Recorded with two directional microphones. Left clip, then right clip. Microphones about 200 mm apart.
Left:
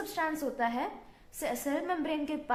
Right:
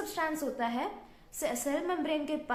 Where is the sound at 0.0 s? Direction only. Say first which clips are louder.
Even; 10° left (ahead or behind).